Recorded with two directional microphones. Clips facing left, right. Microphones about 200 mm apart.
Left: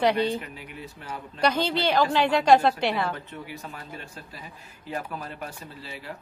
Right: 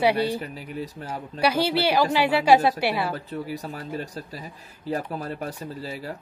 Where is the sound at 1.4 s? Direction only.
10° right (ahead or behind).